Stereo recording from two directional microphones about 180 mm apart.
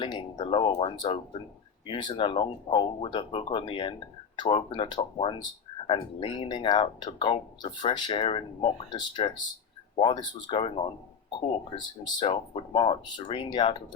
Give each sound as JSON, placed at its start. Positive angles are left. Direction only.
{"t": 0.0, "sound": "speech", "side_deg": 25}